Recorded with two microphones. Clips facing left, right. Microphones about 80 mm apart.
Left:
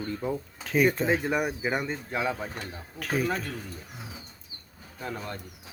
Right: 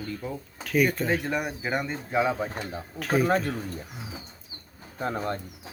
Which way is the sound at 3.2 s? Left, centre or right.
Right.